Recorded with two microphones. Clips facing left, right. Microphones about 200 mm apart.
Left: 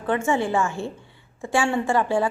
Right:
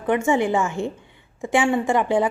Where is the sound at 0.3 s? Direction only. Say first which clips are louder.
Right 2 dB; 15° right (ahead or behind).